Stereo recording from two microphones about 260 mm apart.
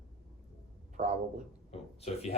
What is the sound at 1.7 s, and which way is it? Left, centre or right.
Speech, left.